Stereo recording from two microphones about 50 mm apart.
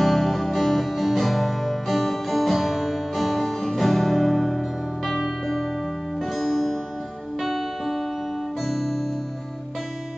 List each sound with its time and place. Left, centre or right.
0.0 s music: centre
7.4 s music: centre